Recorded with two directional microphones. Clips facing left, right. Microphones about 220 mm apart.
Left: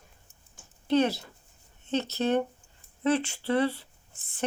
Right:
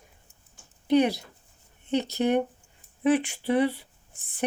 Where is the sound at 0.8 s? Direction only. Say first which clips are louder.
Right 3 dB; 15° right (ahead or behind).